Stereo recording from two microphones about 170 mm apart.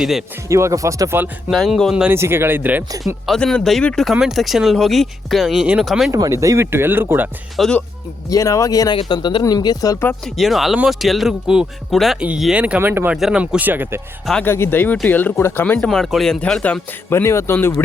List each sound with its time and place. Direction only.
0.0 s speech: centre (ahead or behind)
0.4 s speech: 15° right (ahead or behind)
1.5 s speech: centre (ahead or behind)
2.1 s speech: 15° right (ahead or behind)
3.2 s speech: 5° left (ahead or behind)
6.1 s speech: 20° right (ahead or behind)
7.5 s speech: centre (ahead or behind)
8.3 s speech: 20° left (ahead or behind)
10.2 s speech: centre (ahead or behind)
14.3 s speech: 5° left (ahead or behind)
17.1 s speech: 15° left (ahead or behind)